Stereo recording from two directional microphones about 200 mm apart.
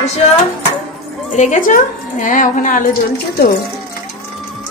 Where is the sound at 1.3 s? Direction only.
35° left (ahead or behind).